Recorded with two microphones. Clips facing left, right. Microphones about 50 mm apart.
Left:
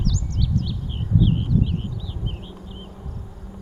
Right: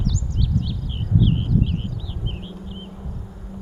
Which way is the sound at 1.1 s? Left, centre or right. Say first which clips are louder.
Even; right.